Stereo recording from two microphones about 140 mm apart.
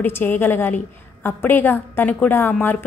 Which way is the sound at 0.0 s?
15° left (ahead or behind).